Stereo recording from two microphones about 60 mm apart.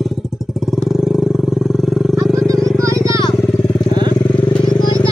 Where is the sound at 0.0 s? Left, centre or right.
Centre.